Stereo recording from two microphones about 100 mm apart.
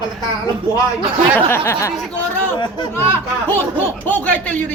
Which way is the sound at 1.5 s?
25° left (ahead or behind).